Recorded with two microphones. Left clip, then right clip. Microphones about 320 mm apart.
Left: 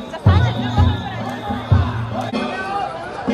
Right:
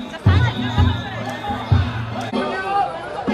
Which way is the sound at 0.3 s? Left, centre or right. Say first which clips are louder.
Left 1 dB; left.